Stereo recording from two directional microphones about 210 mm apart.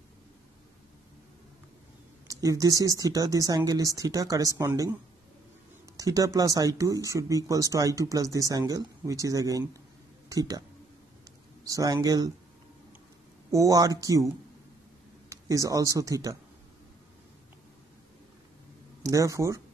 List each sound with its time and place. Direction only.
2.2 s speech: 15° right (ahead or behind)
5.9 s speech: 15° right (ahead or behind)
11.6 s speech: 15° right (ahead or behind)
13.5 s speech: 15° right (ahead or behind)
15.2 s speech: 15° right (ahead or behind)
19.0 s speech: 15° right (ahead or behind)